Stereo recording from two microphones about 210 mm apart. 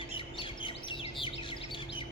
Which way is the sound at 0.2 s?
25° left (ahead or behind).